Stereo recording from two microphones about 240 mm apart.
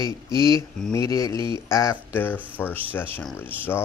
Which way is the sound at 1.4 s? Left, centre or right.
Centre.